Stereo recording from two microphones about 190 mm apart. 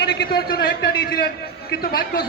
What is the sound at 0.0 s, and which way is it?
A man's voice, 55° left (ahead or behind).